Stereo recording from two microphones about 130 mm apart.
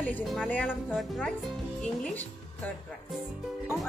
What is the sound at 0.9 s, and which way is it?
Speech, centre (ahead or behind).